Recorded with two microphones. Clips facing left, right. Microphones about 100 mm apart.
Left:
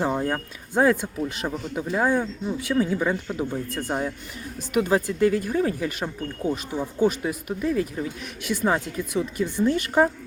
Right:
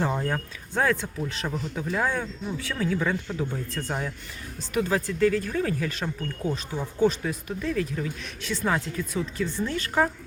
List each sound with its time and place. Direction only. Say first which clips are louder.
0.0 s speech: left 3 dB; 10° left (ahead or behind)